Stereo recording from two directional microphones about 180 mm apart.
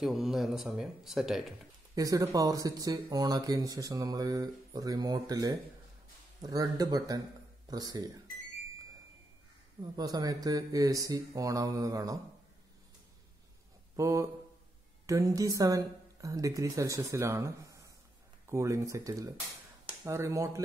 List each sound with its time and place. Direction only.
0.0 s speech: centre (ahead or behind)
2.0 s speech: 20° right (ahead or behind)
9.9 s speech: 20° right (ahead or behind)
13.9 s a woman's voice: 15° right (ahead or behind)